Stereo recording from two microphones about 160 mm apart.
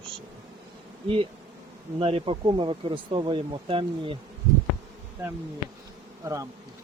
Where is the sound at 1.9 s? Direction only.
35° right (ahead or behind).